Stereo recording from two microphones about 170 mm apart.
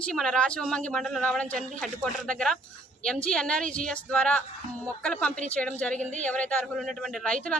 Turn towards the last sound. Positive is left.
turn(degrees=5)  # may be behind; listen again after turning